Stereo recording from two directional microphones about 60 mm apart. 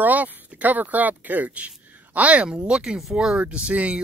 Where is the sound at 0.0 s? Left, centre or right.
Right.